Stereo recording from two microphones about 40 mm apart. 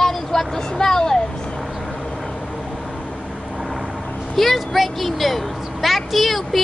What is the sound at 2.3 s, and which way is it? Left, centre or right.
Vehicle, centre.